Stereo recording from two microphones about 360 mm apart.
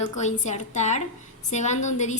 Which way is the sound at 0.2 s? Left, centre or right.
Centre.